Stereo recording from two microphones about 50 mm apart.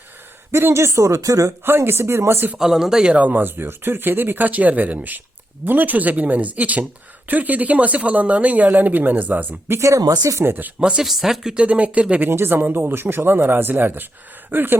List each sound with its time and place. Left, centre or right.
0.7 s speech: right
1.6 s speech: right
2.6 s speech: centre
3.2 s speech: right
9.7 s speech: right
10.4 s speech: right
10.8 s speech: centre
11.0 s speech: centre
11.5 s speech: right
12.3 s speech: right